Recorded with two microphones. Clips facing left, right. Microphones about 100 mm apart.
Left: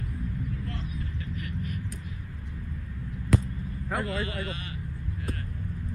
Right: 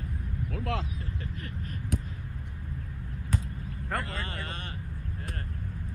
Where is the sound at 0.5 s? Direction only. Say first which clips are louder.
Right 4 dB; 90° right.